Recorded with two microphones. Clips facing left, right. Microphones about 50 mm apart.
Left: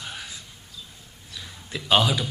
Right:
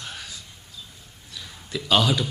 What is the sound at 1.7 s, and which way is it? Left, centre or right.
Speech, centre.